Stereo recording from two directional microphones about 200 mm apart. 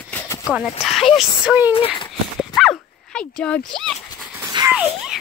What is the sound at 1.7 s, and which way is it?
Speech, 30° left (ahead or behind).